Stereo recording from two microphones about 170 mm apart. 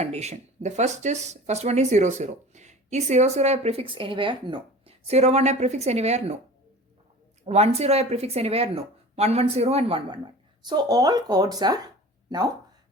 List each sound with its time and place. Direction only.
0.0 s speech: 40° right (ahead or behind)
7.4 s speech: 40° right (ahead or behind)
10.7 s speech: 25° right (ahead or behind)